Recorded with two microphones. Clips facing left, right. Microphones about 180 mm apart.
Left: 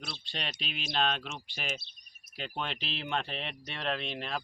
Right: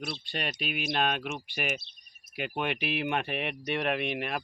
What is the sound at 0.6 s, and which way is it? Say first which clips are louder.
Speech: right 7 dB; 55° right (ahead or behind).